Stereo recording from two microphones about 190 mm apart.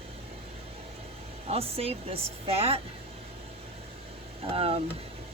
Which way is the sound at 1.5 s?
30° right (ahead or behind).